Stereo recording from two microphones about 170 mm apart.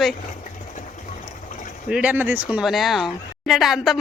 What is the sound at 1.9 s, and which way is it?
Speech, 10° right (ahead or behind).